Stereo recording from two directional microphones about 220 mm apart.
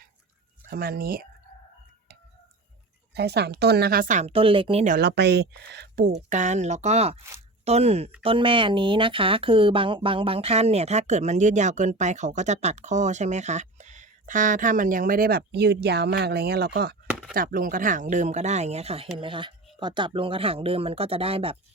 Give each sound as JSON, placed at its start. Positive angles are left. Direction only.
{"t": 0.7, "sound": "speech", "side_deg": -45}
{"t": 3.2, "sound": "speech", "side_deg": -50}
{"t": 4.9, "sound": "speech", "side_deg": -50}
{"t": 6.2, "sound": "speech", "side_deg": -30}